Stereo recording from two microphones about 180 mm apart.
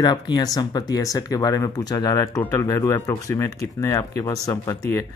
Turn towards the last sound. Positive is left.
turn(degrees=20)  # may be behind; listen again after turning